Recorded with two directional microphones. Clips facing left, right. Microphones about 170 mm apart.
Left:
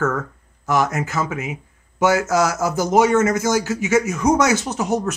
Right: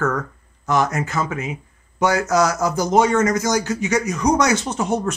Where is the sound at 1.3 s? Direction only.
20° left (ahead or behind).